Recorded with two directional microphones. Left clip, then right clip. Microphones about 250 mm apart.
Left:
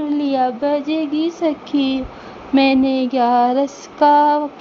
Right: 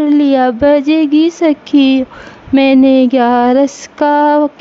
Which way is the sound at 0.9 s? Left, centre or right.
Right.